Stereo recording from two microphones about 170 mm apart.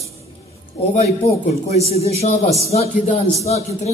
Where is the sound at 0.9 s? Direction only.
40° left (ahead or behind).